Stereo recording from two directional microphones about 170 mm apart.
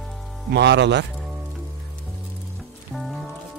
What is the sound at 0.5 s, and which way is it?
Speech, 90° right.